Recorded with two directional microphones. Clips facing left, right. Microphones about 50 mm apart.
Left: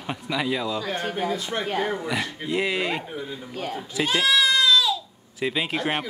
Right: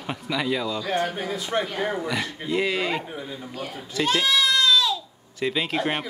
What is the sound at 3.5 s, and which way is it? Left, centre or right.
Speech, left.